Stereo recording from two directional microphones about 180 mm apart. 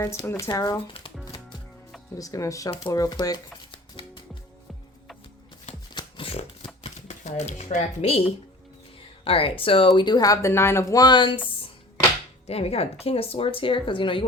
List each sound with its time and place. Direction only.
0.0 s speech: 15° left (ahead or behind)
2.1 s speech: 20° left (ahead or behind)
5.9 s shuffling cards: 30° left (ahead or behind)
6.8 s speech: 40° left (ahead or behind)
12.5 s speech: 35° left (ahead or behind)